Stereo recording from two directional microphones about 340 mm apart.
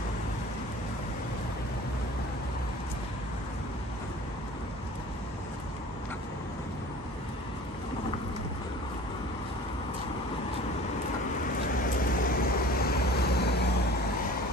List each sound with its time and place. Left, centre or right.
12.0 s vehicle: left